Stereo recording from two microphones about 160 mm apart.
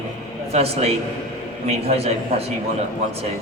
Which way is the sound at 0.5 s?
40° right (ahead or behind).